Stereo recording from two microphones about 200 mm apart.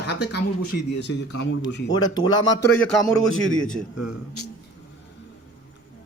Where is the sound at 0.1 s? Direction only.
55° left (ahead or behind).